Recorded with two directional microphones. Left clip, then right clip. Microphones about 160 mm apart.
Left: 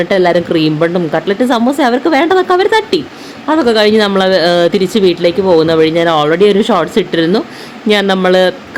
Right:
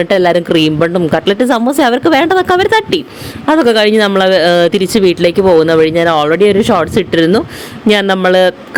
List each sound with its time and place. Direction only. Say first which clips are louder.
0.0 s speech: even; 40° right (ahead or behind)